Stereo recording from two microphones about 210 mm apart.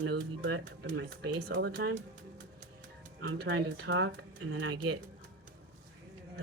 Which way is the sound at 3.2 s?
55° right (ahead or behind).